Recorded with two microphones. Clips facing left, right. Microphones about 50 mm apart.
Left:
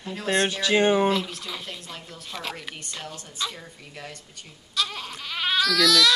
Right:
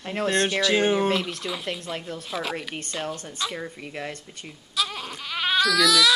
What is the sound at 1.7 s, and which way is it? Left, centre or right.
Speech, right.